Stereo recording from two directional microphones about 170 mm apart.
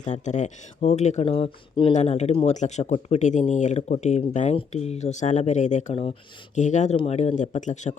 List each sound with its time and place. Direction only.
0.0 s speech: 45° left (ahead or behind)
1.9 s speech: 45° left (ahead or behind)